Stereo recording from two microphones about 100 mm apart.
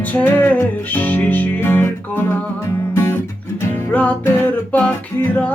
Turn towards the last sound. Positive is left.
turn(degrees=20)  # may be behind; listen again after turning